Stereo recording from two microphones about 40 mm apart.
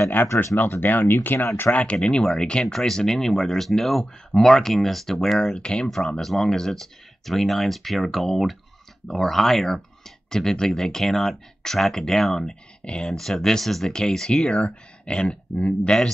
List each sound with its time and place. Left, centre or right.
0.1 s speech: left
1.7 s speech: left
2.3 s speech: centre
5.4 s speech: left
6.1 s speech: centre
13.0 s speech: centre; by 16.0 s left